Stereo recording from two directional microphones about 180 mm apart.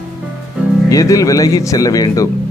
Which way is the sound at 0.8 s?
20° left (ahead or behind).